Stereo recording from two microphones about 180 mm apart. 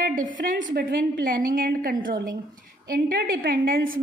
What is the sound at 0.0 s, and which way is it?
A woman's voice, 50° right (ahead or behind).